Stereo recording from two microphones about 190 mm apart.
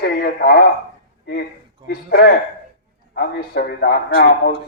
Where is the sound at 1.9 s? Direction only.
55° left (ahead or behind).